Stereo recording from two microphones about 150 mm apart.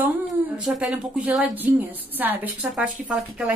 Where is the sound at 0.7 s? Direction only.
5° right (ahead or behind).